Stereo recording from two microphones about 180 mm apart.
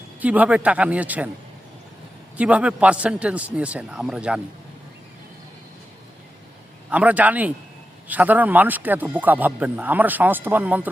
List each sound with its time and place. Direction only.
0.2 s speech: 10° right (ahead or behind)
2.4 s speech: 5° right (ahead or behind)
6.9 s speech: 10° right (ahead or behind)